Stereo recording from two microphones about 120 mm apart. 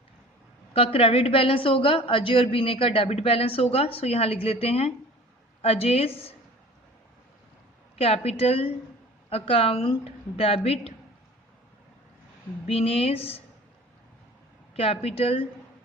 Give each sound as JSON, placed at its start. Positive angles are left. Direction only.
{"t": 0.9, "sound": "a woman's voice", "side_deg": 55}
{"t": 7.9, "sound": "a woman's voice", "side_deg": 55}
{"t": 12.6, "sound": "a woman's voice", "side_deg": 55}
{"t": 14.8, "sound": "a woman's voice", "side_deg": 55}